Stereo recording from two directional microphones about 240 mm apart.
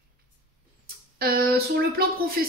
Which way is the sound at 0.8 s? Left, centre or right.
Right.